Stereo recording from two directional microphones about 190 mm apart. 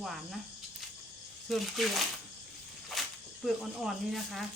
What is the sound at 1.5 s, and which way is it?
Speech, centre (ahead or behind).